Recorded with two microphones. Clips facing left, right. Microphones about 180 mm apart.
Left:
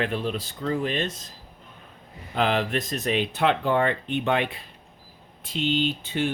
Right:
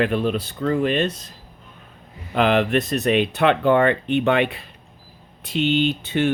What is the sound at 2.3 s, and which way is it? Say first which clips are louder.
Speech: right 6 dB; 70° right (ahead or behind).